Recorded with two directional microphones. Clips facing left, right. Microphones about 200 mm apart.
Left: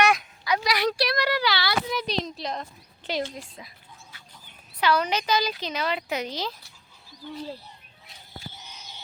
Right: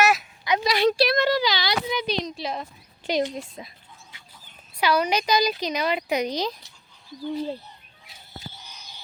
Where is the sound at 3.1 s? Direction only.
15° right (ahead or behind).